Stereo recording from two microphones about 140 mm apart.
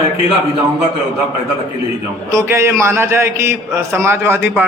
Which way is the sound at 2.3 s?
20° right (ahead or behind).